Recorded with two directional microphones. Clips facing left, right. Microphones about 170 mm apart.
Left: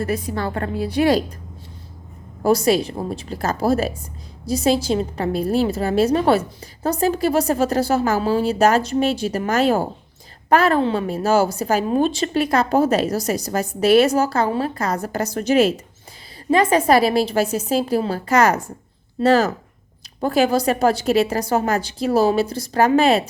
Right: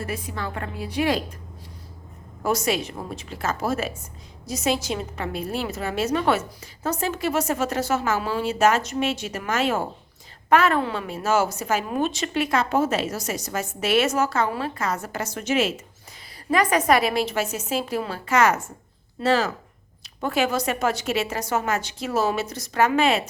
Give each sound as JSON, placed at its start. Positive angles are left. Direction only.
{"t": 0.0, "sound": "a woman's voice", "side_deg": 40}
{"t": 2.4, "sound": "a woman's voice", "side_deg": 35}
{"t": 16.5, "sound": "a woman's voice", "side_deg": 25}